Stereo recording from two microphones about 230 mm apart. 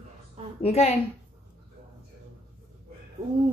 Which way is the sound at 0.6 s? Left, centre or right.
Left.